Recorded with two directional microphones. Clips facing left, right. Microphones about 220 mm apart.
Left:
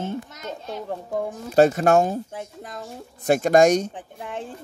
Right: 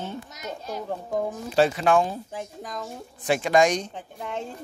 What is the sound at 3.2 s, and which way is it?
Speech, 45° left (ahead or behind).